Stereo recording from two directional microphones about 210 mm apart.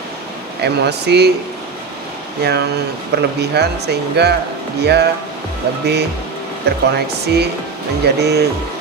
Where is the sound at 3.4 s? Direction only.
50° right (ahead or behind).